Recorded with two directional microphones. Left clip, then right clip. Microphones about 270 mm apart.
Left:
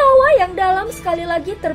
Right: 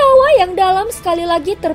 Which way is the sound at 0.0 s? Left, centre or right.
Right.